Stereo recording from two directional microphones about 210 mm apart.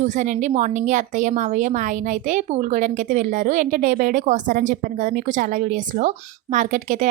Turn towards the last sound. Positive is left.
turn(degrees=-35)  # may be behind; listen again after turning